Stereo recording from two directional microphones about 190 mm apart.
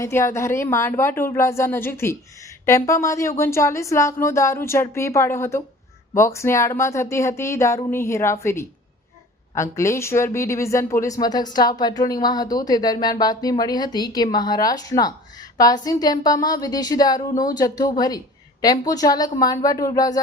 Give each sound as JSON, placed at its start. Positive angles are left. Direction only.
{"t": 0.0, "sound": "speech", "side_deg": 15}